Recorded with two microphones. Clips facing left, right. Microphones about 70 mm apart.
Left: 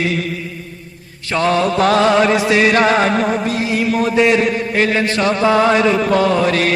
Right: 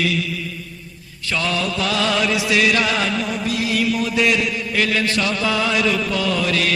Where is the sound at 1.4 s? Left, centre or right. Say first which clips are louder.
Left 8 dB; left.